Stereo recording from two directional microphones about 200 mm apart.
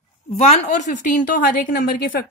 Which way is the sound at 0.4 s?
35° left (ahead or behind).